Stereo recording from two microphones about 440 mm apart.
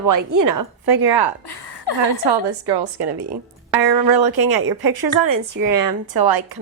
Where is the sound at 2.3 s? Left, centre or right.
Right.